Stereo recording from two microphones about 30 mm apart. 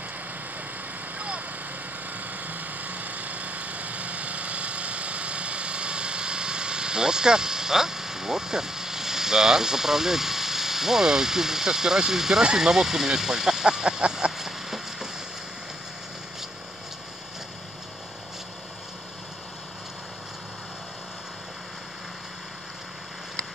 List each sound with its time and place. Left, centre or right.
2.1 s vehicle: right; by 12.4 s centre
12.5 s speech: centre
14.3 s a sound: centre